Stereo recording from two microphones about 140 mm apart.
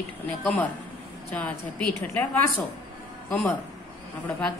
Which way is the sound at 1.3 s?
10° left (ahead or behind).